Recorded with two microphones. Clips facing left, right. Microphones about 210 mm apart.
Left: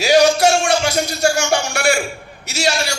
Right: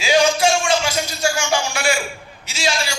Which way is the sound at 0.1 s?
40° left (ahead or behind).